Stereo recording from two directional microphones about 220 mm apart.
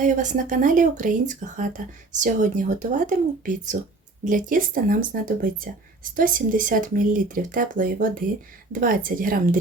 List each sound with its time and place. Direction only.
0.0 s speech: 35° right (ahead or behind)